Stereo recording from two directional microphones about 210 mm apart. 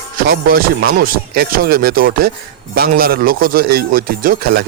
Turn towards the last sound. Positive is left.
turn(degrees=-45)  # may be behind; listen again after turning